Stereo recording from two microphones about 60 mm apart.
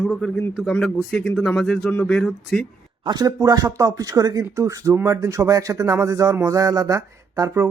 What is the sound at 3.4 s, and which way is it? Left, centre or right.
Speech, right.